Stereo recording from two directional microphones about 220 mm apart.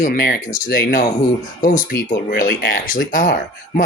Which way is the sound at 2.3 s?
45° left (ahead or behind).